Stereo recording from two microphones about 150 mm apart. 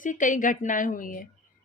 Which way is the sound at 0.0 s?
60° left (ahead or behind).